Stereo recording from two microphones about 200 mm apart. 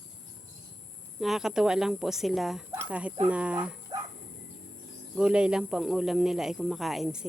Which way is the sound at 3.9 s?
20° right (ahead or behind).